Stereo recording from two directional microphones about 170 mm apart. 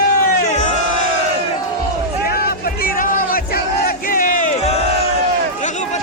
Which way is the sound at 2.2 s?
65° left (ahead or behind).